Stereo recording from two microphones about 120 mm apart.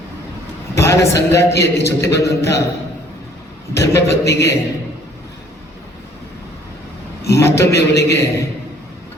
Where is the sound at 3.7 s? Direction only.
25° left (ahead or behind).